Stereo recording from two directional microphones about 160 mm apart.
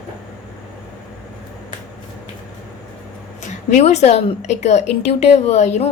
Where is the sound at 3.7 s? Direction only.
45° left (ahead or behind).